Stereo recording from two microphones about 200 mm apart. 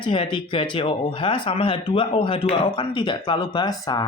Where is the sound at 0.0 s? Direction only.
25° left (ahead or behind).